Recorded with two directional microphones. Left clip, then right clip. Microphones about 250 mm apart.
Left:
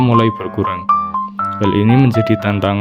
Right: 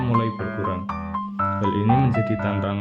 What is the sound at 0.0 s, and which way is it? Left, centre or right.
Speech, left.